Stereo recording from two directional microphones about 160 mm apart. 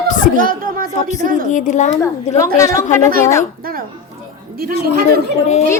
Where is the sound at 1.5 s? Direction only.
50° left (ahead or behind).